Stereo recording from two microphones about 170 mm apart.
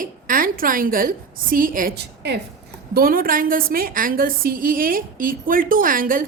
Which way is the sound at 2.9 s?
60° right (ahead or behind).